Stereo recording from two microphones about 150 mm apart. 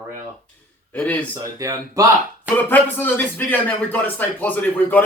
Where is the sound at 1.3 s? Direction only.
20° right (ahead or behind).